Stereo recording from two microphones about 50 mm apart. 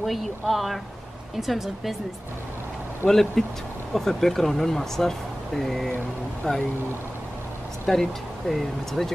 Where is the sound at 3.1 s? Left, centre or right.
Centre.